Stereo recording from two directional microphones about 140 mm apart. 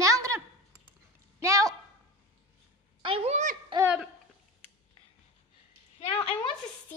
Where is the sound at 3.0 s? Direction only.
40° right (ahead or behind).